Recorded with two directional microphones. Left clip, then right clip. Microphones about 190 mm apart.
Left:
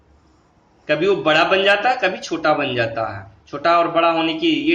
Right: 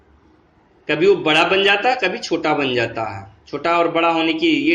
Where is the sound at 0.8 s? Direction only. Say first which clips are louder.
Right 2 dB; 5° right (ahead or behind).